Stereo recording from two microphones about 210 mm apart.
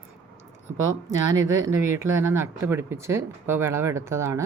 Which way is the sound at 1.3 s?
15° right (ahead or behind).